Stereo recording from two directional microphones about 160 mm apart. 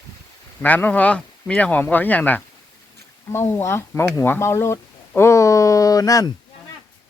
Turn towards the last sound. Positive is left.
turn(degrees=20)  # may be behind; listen again after turning